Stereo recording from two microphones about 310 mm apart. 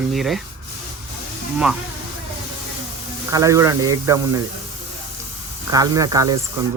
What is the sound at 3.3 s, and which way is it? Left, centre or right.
Speech, centre.